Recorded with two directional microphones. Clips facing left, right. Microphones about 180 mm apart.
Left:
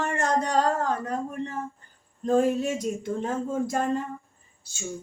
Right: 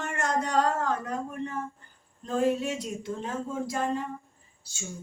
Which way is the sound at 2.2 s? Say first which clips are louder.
Left 4 dB; 45° left (ahead or behind).